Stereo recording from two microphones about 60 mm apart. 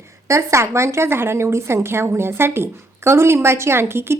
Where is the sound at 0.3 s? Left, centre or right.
Right.